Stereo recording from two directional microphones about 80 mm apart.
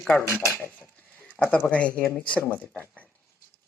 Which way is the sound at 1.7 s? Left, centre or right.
Centre.